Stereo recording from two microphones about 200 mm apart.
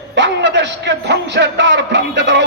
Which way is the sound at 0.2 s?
65° right (ahead or behind).